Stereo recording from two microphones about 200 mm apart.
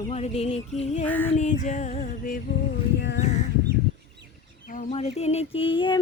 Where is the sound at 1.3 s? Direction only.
35° left (ahead or behind).